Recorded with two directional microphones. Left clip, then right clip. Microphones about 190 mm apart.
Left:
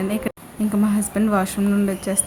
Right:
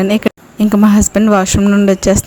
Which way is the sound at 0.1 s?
45° right (ahead or behind).